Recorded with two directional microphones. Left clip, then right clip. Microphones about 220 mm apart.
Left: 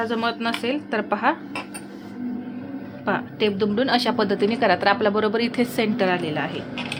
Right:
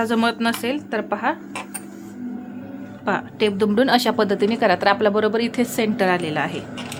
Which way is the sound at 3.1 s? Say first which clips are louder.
Right 2 dB; 10° right (ahead or behind).